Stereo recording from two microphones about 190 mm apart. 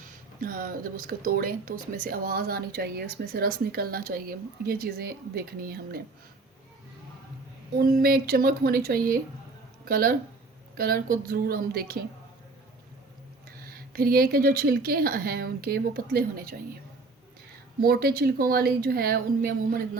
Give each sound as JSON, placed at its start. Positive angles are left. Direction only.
{"t": 0.3, "sound": "speech", "side_deg": -45}
{"t": 7.8, "sound": "speech", "side_deg": -50}
{"t": 13.6, "sound": "speech", "side_deg": -50}
{"t": 17.7, "sound": "speech", "side_deg": -55}